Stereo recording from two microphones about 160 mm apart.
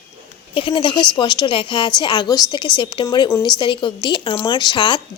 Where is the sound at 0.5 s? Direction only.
30° left (ahead or behind).